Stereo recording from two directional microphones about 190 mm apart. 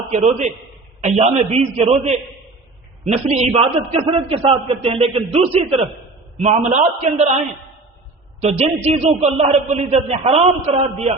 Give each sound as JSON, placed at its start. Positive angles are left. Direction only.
{"t": 0.1, "sound": "a man's voice", "side_deg": -35}
{"t": 8.4, "sound": "a man's voice", "side_deg": -35}